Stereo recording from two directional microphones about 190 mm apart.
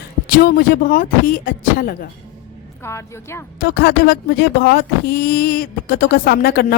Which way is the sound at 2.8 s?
15° left (ahead or behind).